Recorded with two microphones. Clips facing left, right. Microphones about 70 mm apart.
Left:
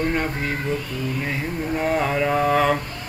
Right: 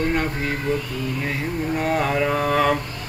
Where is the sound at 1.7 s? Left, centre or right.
Centre.